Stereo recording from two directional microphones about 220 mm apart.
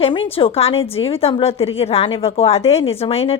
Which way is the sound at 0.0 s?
25° left (ahead or behind).